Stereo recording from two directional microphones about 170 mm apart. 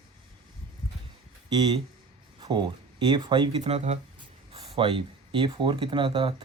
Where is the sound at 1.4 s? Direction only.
25° right (ahead or behind).